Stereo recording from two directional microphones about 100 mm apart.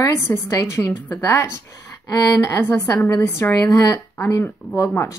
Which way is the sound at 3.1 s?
20° left (ahead or behind).